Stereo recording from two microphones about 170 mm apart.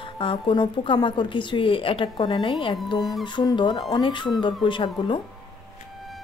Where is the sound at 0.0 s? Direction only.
30° left (ahead or behind).